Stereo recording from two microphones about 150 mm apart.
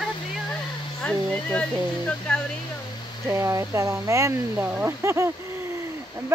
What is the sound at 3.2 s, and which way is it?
Speech, 20° right (ahead or behind).